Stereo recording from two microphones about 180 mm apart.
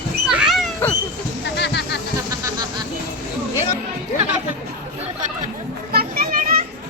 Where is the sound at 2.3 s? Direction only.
20° right (ahead or behind).